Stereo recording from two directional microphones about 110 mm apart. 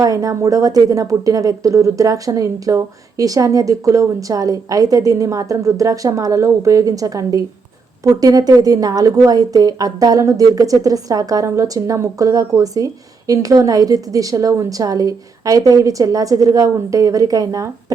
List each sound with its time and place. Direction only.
0.0 s a woman's voice: 30° right (ahead or behind)